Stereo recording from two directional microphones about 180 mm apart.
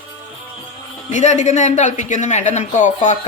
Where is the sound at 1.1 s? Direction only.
40° left (ahead or behind).